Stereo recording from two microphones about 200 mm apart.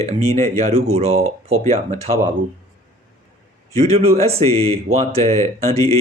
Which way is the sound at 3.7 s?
30° right (ahead or behind).